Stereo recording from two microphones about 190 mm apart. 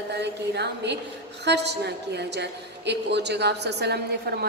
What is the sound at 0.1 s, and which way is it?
A woman's voice, 65° right (ahead or behind).